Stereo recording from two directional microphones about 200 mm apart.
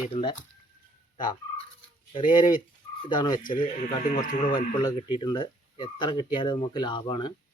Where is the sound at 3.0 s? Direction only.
20° left (ahead or behind).